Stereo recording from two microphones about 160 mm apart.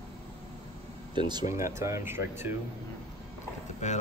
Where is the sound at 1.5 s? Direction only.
15° right (ahead or behind).